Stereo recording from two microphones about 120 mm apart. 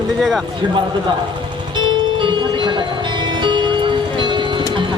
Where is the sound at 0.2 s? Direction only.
Centre (ahead or behind).